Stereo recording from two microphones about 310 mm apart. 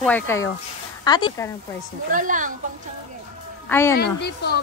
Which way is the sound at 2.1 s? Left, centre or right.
Right.